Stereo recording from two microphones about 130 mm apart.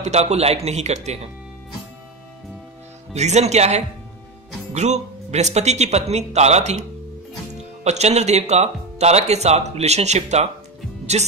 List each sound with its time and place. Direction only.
0.0 s speech: 55° right (ahead or behind)
3.1 s speech: 60° right (ahead or behind)